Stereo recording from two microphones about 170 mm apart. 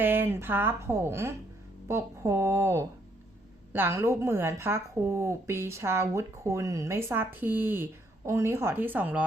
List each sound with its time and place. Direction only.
0.0 s a woman's voice: 10° right (ahead or behind)